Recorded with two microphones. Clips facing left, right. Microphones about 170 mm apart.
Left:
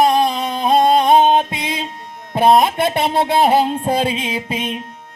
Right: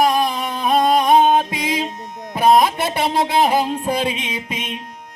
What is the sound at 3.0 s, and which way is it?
Music, 30° left (ahead or behind).